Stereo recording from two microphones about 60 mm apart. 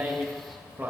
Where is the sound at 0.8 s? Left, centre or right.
Right.